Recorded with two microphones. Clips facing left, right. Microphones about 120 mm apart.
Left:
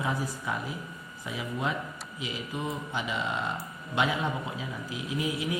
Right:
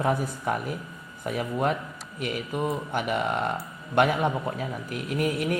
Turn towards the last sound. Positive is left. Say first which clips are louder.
# right 5 dB
turn(degrees=-60)  # may be behind; listen again after turning